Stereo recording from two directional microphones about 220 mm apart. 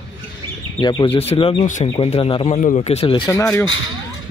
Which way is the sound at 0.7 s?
20° left (ahead or behind).